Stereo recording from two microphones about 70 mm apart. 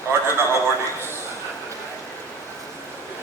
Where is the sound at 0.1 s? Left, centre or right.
Right.